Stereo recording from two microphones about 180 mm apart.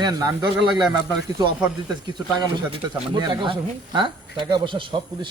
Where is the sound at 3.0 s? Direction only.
25° right (ahead or behind).